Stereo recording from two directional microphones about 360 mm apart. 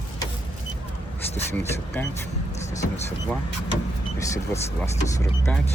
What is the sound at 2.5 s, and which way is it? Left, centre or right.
Vehicle, centre.